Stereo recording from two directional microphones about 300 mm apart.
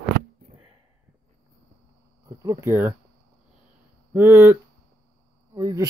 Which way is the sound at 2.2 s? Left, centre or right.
Centre.